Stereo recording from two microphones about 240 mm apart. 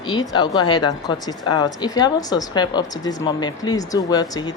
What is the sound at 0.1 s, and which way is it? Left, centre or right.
Speech, centre.